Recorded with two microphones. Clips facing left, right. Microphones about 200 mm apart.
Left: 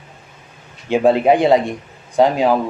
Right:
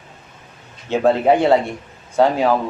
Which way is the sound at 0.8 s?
15° left (ahead or behind).